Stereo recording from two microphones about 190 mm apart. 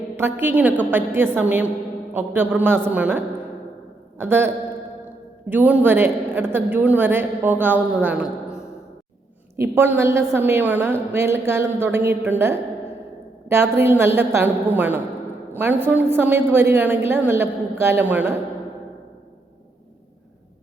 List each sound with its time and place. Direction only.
0.2 s a woman's voice: 10° right (ahead or behind)